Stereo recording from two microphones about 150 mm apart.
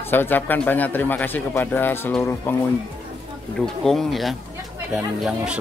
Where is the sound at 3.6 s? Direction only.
Centre (ahead or behind).